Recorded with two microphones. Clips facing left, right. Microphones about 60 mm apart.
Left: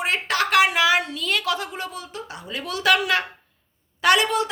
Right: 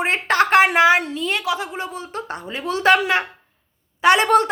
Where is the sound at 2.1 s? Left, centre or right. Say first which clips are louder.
Right 6 dB; right.